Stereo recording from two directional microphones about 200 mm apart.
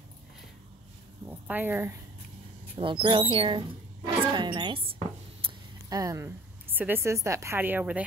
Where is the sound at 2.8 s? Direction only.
25° right (ahead or behind).